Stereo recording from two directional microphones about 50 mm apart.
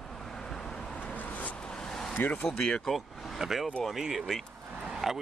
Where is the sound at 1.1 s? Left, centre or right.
Left.